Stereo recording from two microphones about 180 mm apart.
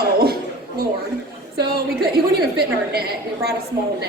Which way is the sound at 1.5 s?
60° right (ahead or behind).